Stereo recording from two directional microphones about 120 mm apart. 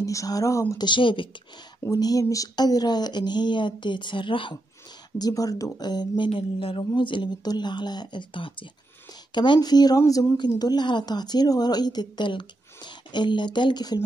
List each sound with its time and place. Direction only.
0.0 s speech: 30° left (ahead or behind)
0.8 s speech: 45° left (ahead or behind)
1.9 s speech: 30° left (ahead or behind)
5.2 s speech: 30° left (ahead or behind)